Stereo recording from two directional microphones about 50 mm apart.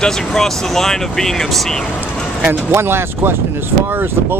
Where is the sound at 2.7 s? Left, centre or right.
Right.